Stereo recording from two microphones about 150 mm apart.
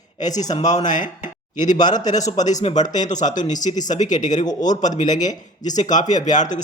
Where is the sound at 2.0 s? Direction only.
55° left (ahead or behind).